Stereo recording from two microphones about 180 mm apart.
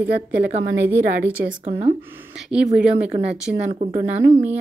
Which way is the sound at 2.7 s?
5° right (ahead or behind).